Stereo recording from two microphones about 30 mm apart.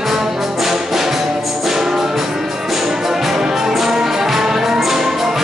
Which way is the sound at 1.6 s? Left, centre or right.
Centre.